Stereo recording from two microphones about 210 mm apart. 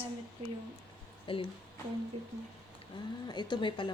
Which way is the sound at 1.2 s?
25° left (ahead or behind).